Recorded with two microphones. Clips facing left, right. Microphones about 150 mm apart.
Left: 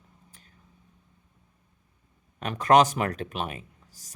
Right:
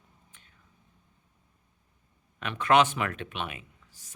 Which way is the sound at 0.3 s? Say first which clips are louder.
Left 4 dB; 35° left (ahead or behind).